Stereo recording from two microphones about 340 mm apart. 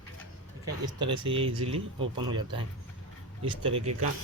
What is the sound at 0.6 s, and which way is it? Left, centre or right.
Speech, centre.